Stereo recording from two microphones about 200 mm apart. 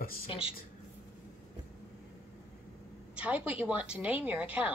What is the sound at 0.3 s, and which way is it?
Speech, 30° left (ahead or behind).